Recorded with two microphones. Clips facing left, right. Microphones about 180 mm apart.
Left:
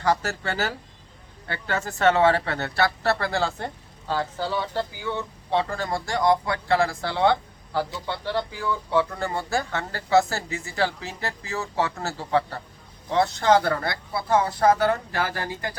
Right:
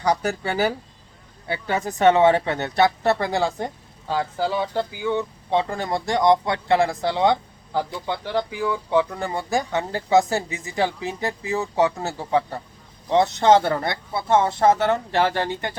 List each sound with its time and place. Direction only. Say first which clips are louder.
0.0 s speech: right 2 dB; 15° right (ahead or behind)